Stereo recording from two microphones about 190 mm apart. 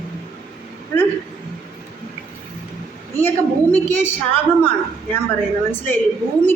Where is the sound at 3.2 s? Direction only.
10° left (ahead or behind).